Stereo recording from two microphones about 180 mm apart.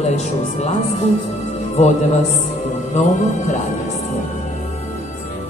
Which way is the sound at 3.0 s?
40° left (ahead or behind).